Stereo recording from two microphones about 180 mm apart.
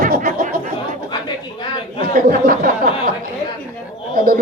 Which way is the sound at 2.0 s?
55° right (ahead or behind).